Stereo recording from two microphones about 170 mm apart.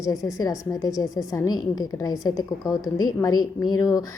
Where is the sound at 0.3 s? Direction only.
20° left (ahead or behind).